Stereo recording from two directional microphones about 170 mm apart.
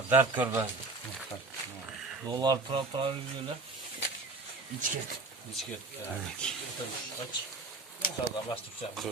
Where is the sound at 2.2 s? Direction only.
25° right (ahead or behind).